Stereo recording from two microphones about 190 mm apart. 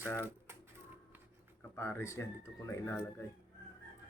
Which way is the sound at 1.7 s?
15° left (ahead or behind).